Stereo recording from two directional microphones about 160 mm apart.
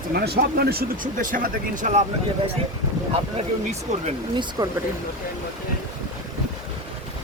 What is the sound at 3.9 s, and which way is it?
Speech, 45° right (ahead or behind).